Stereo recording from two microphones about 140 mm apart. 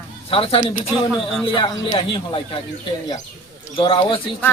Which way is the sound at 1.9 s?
40° left (ahead or behind).